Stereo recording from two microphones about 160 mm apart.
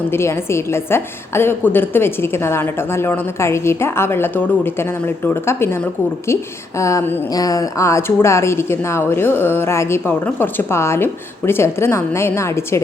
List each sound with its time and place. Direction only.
0.1 s a woman's voice: 15° left (ahead or behind)